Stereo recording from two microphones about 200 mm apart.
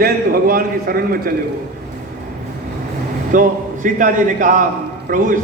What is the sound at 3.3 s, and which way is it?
A man's voice, 40° right (ahead or behind).